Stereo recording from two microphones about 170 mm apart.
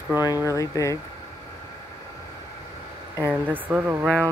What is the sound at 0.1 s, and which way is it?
Speech, 15° right (ahead or behind).